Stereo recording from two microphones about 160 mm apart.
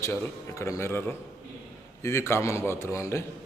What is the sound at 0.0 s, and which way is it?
A man's voice, 15° left (ahead or behind).